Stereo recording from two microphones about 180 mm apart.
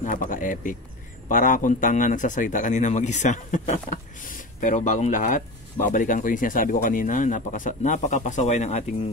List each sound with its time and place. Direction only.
0.0 s a man's voice: 50° left (ahead or behind)